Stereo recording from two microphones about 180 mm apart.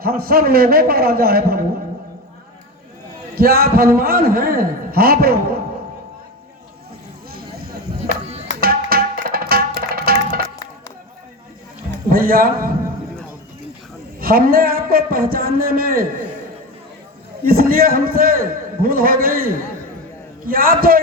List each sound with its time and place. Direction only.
0.0 s a man's voice: 55° right (ahead or behind)
3.3 s a man's voice: 55° right (ahead or behind)
8.6 s tabla: 55° right (ahead or behind)
11.9 s a man's voice: 55° right (ahead or behind)
14.2 s a man's voice: 55° right (ahead or behind)
17.4 s a man's voice: 55° right (ahead or behind)